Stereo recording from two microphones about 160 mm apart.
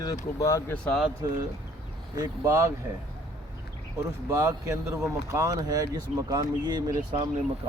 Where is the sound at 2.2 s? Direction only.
20° right (ahead or behind).